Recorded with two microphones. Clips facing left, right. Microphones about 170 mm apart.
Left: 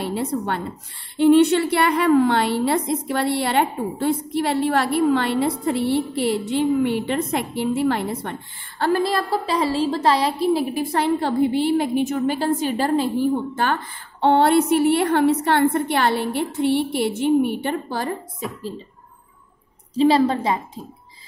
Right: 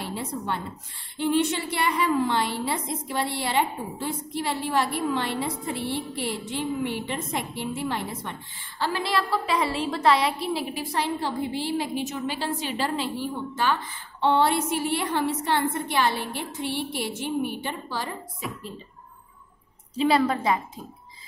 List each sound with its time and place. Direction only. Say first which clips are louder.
0.0 s a woman's voice: left 8 dB; 65° left (ahead or behind); by 10.6 s 35° left (ahead or behind)
10.6 s a woman's voice: left 7 dB; 50° left (ahead or behind)
20.0 s a woman's voice: left 5 dB; 30° left (ahead or behind)